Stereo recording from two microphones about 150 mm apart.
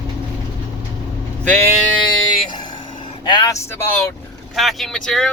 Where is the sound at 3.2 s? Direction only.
25° left (ahead or behind).